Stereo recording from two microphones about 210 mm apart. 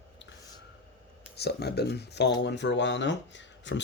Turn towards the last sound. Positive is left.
turn(degrees=60)  # may be behind; listen again after turning